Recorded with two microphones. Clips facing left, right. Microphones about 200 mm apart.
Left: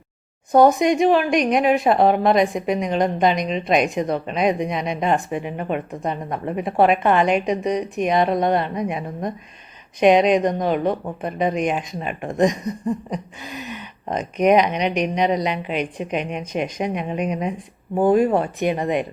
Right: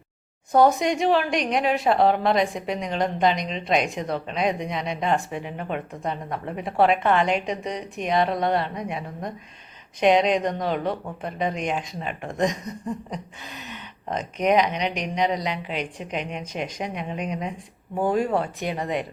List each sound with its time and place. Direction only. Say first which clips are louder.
0.5 s speech: left 4 dB; 15° left (ahead or behind)
17.9 s speech: left 7 dB; 50° left (ahead or behind)
18.2 s speech: left 6 dB; 15° left (ahead or behind)